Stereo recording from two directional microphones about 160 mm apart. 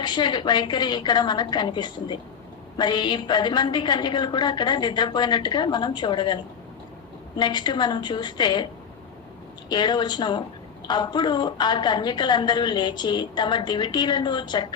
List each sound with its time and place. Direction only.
0.0 s a woman's voice: 25° left (ahead or behind)
9.6 s a woman's voice: 25° left (ahead or behind)